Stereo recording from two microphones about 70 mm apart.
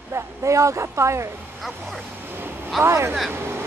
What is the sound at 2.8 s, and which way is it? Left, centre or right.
Speech, right.